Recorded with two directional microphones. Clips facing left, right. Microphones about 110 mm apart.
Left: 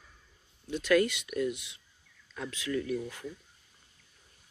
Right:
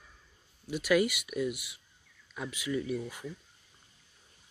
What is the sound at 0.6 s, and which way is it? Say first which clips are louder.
Speech: left 1 dB; 10° right (ahead or behind).